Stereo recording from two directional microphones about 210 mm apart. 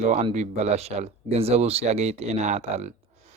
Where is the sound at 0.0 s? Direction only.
35° right (ahead or behind).